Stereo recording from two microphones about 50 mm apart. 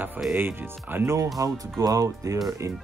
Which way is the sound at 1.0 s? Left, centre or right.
Right.